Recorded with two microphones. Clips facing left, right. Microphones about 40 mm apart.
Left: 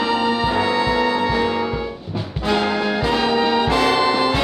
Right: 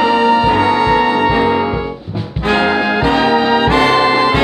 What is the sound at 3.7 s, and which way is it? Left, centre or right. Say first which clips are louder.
Brass instrument: right 5 dB; right.